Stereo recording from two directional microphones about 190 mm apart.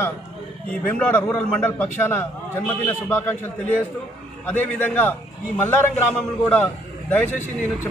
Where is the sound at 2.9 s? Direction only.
10° left (ahead or behind).